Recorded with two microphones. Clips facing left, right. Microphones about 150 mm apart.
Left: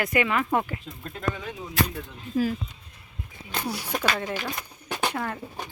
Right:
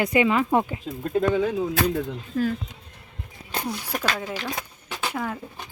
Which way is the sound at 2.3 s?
10° left (ahead or behind).